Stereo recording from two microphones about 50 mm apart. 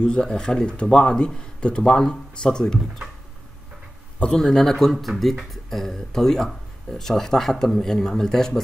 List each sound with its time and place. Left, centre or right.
0.0 s speech: centre
4.4 s speech: centre